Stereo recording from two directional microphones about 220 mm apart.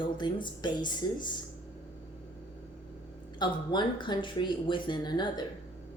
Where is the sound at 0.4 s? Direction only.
20° left (ahead or behind).